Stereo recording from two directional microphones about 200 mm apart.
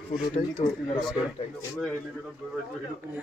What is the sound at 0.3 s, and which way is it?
Speech, 35° left (ahead or behind).